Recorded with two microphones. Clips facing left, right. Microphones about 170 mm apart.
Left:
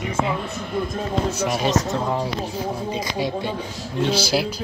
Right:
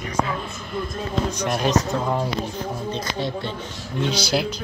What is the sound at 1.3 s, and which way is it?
A woman's voice, 5° left (ahead or behind).